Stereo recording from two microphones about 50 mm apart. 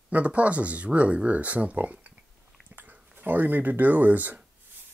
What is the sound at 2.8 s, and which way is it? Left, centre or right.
Speech, right.